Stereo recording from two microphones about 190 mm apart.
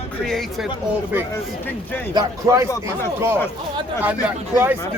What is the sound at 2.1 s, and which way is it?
Speech, 15° right (ahead or behind).